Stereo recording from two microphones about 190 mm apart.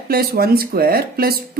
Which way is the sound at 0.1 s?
55° right (ahead or behind).